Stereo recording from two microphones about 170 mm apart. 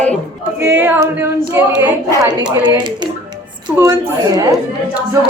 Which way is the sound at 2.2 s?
25° right (ahead or behind).